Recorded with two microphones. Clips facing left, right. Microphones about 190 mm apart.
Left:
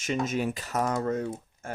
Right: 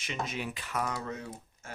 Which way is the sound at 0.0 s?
45° left (ahead or behind).